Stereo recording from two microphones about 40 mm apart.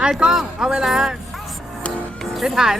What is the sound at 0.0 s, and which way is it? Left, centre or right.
Speech, centre.